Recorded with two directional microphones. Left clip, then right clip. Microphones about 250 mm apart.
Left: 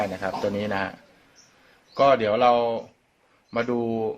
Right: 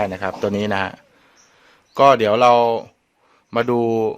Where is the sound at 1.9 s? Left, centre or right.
Right.